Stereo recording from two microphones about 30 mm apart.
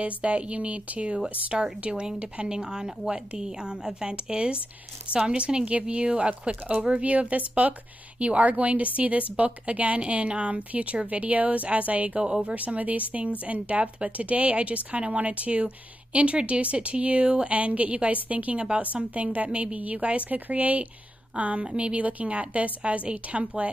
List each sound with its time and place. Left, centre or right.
0.0 s speech: right
1.6 s speech: right
7.0 s speech: right
17.6 s speech: right
20.2 s speech: right
23.0 s speech: right